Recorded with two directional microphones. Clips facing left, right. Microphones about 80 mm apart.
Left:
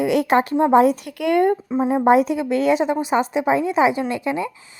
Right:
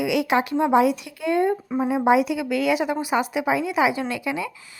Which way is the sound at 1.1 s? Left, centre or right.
Left.